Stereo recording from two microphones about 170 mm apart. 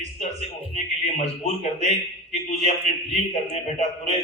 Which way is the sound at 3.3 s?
40° left (ahead or behind).